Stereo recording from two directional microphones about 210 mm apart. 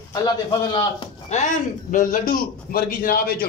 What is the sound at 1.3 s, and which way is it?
A man's voice, 35° left (ahead or behind).